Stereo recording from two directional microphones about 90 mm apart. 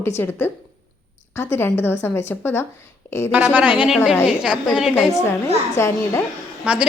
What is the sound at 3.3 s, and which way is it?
A woman's voice, 15° right (ahead or behind).